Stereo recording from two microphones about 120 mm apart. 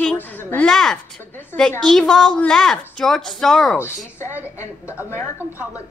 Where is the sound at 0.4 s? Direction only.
15° left (ahead or behind).